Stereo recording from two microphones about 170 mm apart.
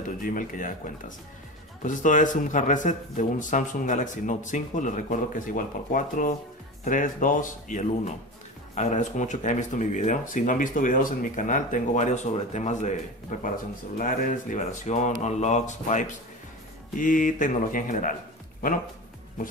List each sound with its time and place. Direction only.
0.0 s speech: 50° left (ahead or behind)